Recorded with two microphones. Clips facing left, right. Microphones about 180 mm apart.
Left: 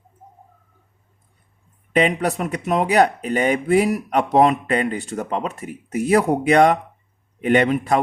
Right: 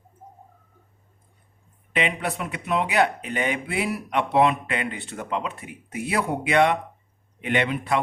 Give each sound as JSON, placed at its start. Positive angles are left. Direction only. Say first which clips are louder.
{"t": 1.9, "sound": "speech", "louder": "left 7 dB", "side_deg": 40}